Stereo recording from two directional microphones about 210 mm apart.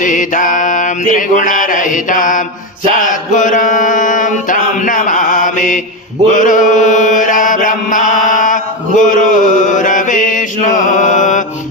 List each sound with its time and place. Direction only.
0.0 s mantra: 40° left (ahead or behind)
6.3 s chant: 40° left (ahead or behind)